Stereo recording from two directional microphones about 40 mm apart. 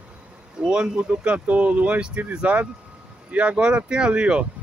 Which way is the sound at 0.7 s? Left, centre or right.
Right.